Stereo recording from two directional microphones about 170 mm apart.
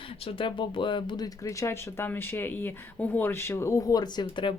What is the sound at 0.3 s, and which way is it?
Speech, 30° left (ahead or behind).